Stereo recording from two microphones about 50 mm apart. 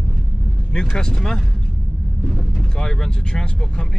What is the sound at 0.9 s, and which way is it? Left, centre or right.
Speech, centre.